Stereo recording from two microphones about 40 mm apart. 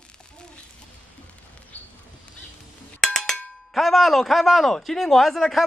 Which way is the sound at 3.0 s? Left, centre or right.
Centre.